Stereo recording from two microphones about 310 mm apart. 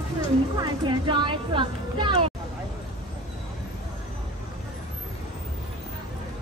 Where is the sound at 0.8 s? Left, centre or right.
Centre.